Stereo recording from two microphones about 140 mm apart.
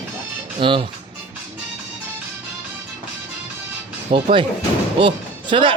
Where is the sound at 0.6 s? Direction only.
35° right (ahead or behind).